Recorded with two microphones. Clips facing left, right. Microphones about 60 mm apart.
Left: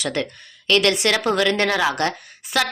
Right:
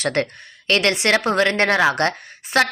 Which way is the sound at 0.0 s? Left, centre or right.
Right.